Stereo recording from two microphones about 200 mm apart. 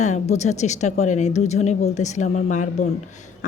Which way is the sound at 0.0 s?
35° left (ahead or behind).